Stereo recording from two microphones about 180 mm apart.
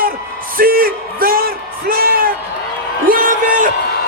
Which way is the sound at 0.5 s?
55° right (ahead or behind).